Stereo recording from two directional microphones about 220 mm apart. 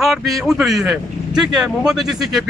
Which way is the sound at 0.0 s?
Centre (ahead or behind).